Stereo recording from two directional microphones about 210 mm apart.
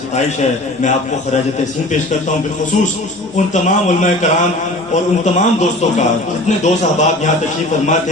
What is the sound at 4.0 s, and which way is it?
A man's voice, 35° left (ahead or behind).